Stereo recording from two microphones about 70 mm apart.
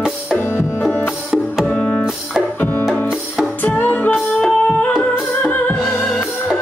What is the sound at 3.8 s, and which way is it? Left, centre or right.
Music, left.